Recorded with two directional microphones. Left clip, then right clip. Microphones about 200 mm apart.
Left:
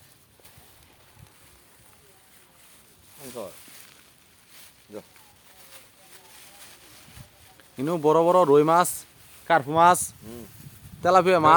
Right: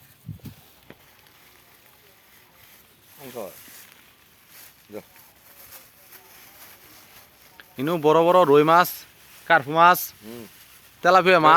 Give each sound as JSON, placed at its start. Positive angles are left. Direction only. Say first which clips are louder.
{"t": 3.2, "sound": "a sound", "louder": "right 2 dB", "side_deg": -35}
{"t": 4.9, "sound": "speech", "louder": "right 2 dB", "side_deg": -30}
{"t": 5.7, "sound": "vehicle", "louder": "right 1 dB", "side_deg": -50}
{"t": 7.8, "sound": "speech", "louder": "right 2 dB", "side_deg": 0}
{"t": 10.2, "sound": "speech", "louder": "right 3 dB", "side_deg": -35}
{"t": 11.0, "sound": "speech", "louder": "right 3 dB", "side_deg": 0}